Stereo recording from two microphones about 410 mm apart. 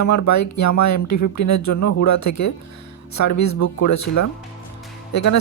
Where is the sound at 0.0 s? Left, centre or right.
Left.